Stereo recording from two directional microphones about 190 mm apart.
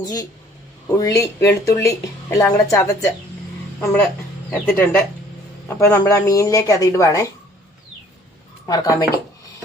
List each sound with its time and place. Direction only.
0.0 s speech: 20° left (ahead or behind)
4.5 s speech: 10° left (ahead or behind)
8.6 s speech: 20° left (ahead or behind)